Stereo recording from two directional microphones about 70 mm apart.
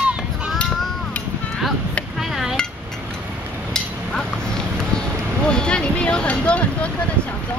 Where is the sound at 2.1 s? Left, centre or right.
Centre.